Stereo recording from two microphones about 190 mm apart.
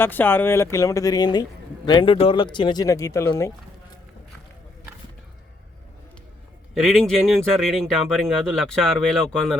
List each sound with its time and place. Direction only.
0.0 s speech: 10° left (ahead or behind)
6.7 s speech: centre (ahead or behind)